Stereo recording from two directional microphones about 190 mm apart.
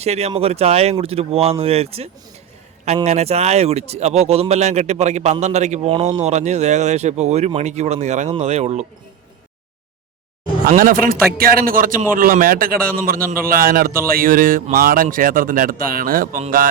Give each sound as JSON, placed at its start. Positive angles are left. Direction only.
{"t": 0.0, "sound": "speech", "side_deg": -35}
{"t": 10.7, "sound": "speech", "side_deg": -45}